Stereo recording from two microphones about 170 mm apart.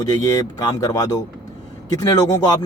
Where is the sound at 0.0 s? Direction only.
20° left (ahead or behind).